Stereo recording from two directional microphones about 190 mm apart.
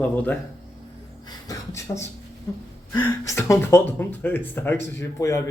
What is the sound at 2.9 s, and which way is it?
Speech, 15° left (ahead or behind).